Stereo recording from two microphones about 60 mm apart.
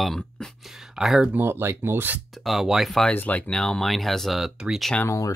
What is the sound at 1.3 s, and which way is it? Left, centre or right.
Speech, right.